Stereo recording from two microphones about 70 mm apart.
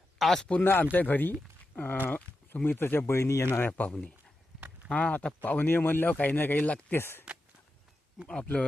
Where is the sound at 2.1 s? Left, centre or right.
Left.